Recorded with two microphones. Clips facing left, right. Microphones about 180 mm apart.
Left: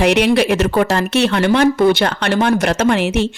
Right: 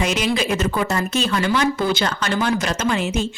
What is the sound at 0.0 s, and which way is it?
A woman's voice, 65° left (ahead or behind).